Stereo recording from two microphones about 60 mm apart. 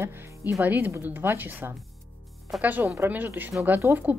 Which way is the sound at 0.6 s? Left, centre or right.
Right.